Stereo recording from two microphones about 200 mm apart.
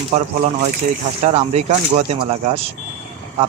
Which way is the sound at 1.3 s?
35° right (ahead or behind).